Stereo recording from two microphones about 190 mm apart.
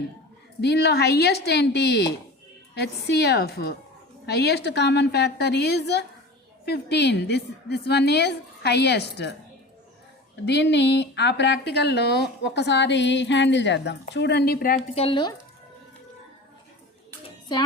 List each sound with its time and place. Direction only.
0.6 s a woman's voice: 60° left (ahead or behind)
10.4 s a woman's voice: 65° left (ahead or behind)
14.9 s speech: 25° left (ahead or behind)